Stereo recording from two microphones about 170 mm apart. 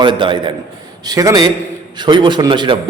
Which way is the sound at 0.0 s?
30° right (ahead or behind).